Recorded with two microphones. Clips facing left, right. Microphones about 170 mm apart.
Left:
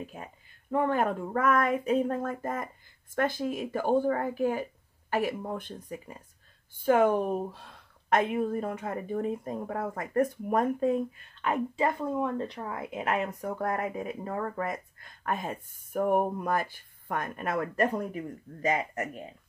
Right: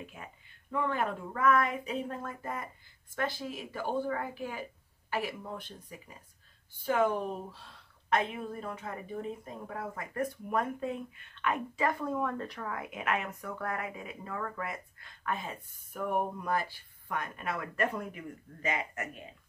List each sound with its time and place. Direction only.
0.0 s a woman's voice: 40° left (ahead or behind)